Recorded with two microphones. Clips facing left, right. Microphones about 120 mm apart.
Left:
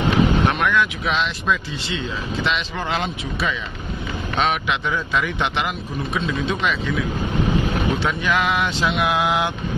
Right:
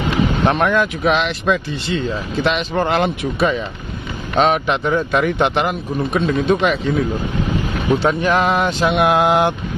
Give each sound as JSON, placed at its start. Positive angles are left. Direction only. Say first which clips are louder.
{"t": 0.5, "sound": "speech", "louder": "right 4 dB", "side_deg": -40}
{"t": 1.1, "sound": "a man's voice", "louder": "right 5 dB", "side_deg": -60}